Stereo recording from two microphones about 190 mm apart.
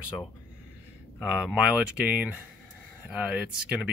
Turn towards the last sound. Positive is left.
turn(degrees=-5)  # may be behind; listen again after turning